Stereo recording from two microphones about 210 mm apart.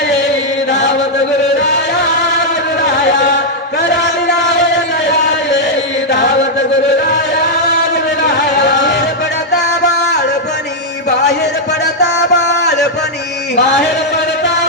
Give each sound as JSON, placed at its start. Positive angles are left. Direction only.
{"t": 8.6, "sound": "music", "side_deg": 55}
{"t": 12.3, "sound": "music", "side_deg": 55}